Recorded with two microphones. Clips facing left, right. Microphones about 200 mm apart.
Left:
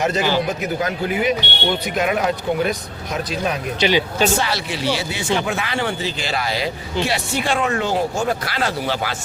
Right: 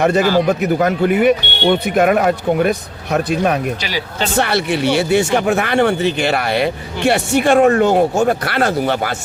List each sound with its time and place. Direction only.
0.0 s speech: 60° right (ahead or behind)
3.8 s speech: 25° left (ahead or behind)
4.4 s speech: 60° right (ahead or behind)